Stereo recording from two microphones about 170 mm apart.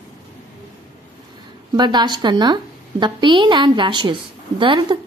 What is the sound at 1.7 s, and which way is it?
A woman's voice, 25° right (ahead or behind).